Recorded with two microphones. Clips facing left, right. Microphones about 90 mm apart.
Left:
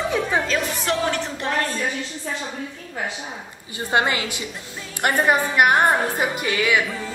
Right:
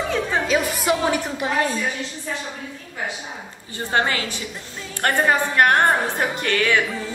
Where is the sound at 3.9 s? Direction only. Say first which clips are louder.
Left 1 dB; 15° left (ahead or behind).